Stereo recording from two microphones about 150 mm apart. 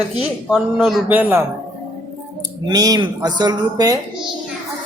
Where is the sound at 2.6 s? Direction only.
25° right (ahead or behind).